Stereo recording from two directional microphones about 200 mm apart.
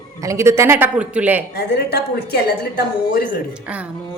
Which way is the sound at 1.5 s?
55° left (ahead or behind).